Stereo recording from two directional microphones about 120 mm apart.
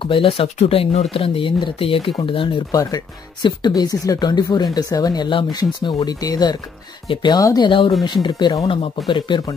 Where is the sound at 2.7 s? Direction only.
30° left (ahead or behind).